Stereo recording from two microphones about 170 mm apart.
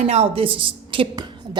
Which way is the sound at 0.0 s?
35° right (ahead or behind).